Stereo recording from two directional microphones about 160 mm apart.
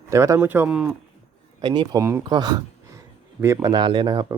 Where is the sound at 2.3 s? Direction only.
25° right (ahead or behind).